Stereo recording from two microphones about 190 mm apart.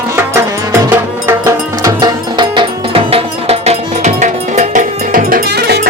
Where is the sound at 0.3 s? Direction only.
15° right (ahead or behind).